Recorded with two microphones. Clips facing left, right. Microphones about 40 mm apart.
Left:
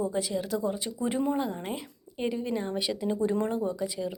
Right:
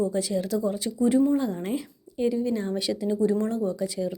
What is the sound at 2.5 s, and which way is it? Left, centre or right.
Speech, centre.